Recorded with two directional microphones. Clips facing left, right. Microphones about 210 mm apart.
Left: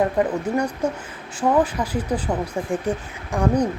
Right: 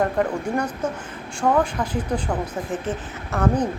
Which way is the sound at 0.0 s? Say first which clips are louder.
Left 2 dB; 5° left (ahead or behind).